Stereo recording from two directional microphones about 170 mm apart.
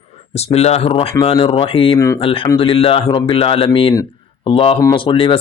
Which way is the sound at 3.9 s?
20° left (ahead or behind).